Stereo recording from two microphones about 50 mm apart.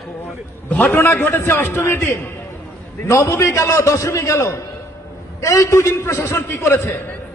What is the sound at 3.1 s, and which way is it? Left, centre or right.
A man's voice, left.